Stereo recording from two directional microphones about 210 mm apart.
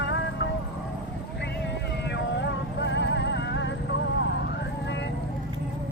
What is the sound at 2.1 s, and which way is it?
Music, 55° left (ahead or behind).